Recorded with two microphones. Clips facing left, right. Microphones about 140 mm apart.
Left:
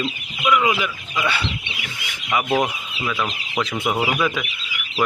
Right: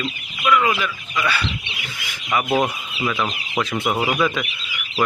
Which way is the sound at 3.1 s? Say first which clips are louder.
Right 1 dB; 10° right (ahead or behind).